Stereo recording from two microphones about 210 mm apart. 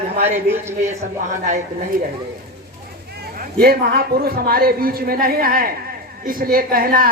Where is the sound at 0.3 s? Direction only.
10° right (ahead or behind).